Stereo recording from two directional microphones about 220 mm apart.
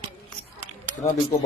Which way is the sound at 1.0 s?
30° left (ahead or behind).